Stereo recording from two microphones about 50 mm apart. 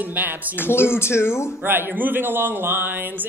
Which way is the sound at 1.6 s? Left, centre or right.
Right.